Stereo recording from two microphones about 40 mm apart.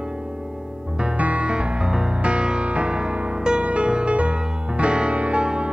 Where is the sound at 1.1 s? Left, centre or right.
Right.